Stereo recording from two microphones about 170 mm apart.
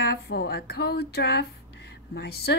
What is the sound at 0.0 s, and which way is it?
Music, 65° left (ahead or behind).